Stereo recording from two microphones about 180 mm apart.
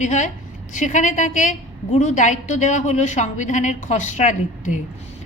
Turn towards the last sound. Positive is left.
turn(degrees=45)  # may be behind; listen again after turning